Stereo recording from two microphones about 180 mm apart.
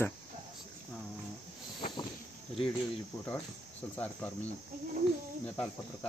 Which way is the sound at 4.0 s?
10° left (ahead or behind).